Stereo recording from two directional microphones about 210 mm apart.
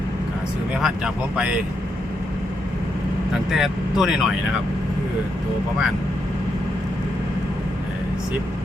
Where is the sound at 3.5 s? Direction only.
Centre (ahead or behind).